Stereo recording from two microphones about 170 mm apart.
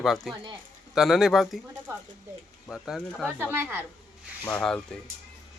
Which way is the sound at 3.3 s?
10° right (ahead or behind).